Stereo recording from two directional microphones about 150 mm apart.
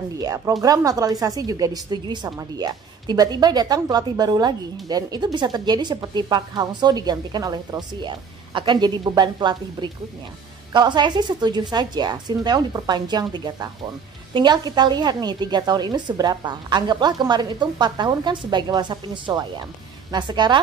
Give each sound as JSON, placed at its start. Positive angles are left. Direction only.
{"t": 0.2, "sound": "a woman's voice", "side_deg": -25}